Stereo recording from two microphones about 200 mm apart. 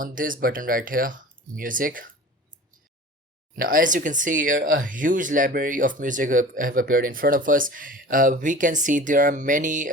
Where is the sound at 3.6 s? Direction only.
45° right (ahead or behind).